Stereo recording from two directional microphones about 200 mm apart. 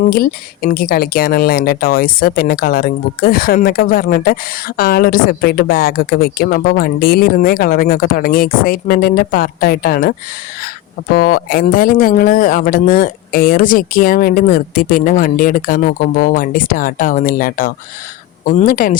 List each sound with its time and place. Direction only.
0.1 s speech: 45° left (ahead or behind)